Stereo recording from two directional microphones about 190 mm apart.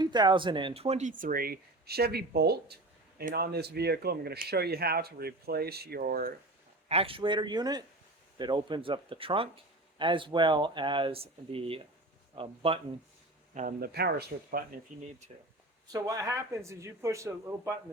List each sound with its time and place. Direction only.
0.0 s speech: 20° right (ahead or behind); by 6.3 s 50° right (ahead or behind)
6.8 s speech: 30° right (ahead or behind)
13.5 s speech: 40° right (ahead or behind)
14.9 s speech: 40° right (ahead or behind)
15.9 s a man's voice: 15° right (ahead or behind)